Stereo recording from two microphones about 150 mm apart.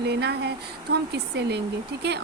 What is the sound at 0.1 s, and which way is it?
Speech, 90° right.